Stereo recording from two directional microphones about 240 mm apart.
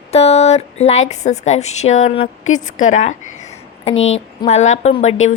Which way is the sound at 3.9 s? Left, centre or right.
Left.